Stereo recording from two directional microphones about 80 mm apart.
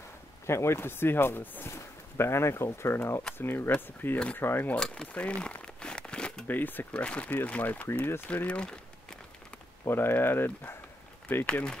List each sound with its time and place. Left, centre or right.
0.5 s speech: left
4.7 s crumpling: centre
6.4 s speech: left
8.5 s speech: centre
9.8 s speech: left
11.4 s speech: centre